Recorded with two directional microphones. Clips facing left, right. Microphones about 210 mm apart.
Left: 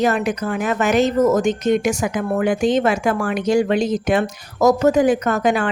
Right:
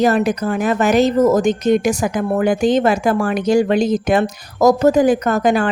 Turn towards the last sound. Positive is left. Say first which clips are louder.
# right 3 dB
turn(degrees=-40)  # may be behind; listen again after turning